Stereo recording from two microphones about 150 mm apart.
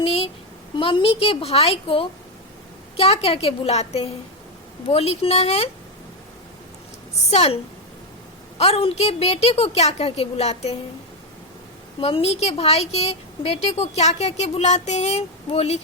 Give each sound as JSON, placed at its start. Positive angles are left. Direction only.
{"t": 0.0, "sound": "a sound", "side_deg": 40}
{"t": 0.8, "sound": "a woman's voice", "side_deg": 35}
{"t": 7.3, "sound": "a woman's voice", "side_deg": 45}
{"t": 11.9, "sound": "a woman's voice", "side_deg": 40}